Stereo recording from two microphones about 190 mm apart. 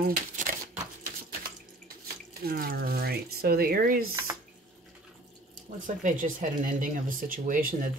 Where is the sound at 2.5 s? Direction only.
55° right (ahead or behind).